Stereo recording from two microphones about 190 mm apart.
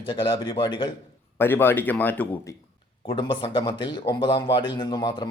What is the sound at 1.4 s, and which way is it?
A man's voice, 10° left (ahead or behind).